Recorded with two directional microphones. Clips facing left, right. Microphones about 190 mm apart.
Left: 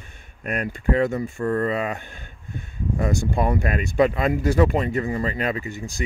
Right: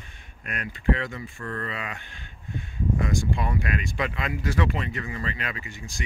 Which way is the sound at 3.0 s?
45° left (ahead or behind).